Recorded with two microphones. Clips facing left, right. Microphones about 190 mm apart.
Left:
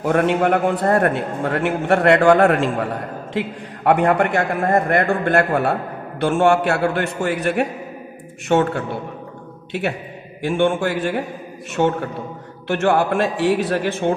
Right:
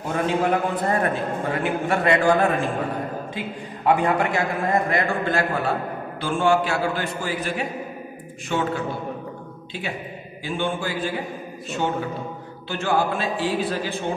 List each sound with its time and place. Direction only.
0.0 s a man's voice: 70° left (ahead or behind)